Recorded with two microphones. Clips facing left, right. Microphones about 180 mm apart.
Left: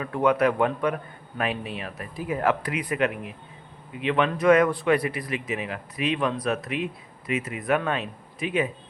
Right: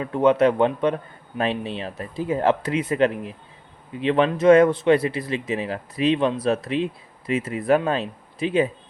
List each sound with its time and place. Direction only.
0.0 s speech: 25° right (ahead or behind)